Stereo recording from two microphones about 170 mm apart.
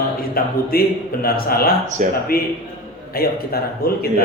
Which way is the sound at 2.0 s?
50° right (ahead or behind).